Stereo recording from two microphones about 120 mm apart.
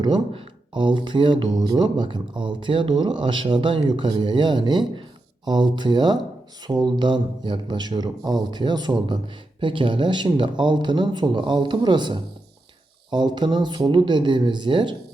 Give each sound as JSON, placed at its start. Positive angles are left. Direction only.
{"t": 0.0, "sound": "speech", "side_deg": -40}